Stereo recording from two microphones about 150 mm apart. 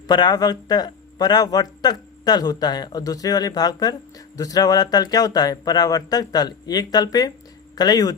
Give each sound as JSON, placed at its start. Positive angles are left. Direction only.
{"t": 0.1, "sound": "speech", "side_deg": 30}